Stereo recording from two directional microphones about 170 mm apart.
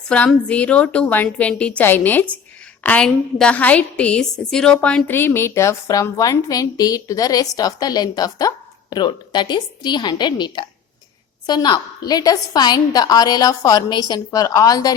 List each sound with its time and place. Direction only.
0.1 s a woman's voice: 5° left (ahead or behind)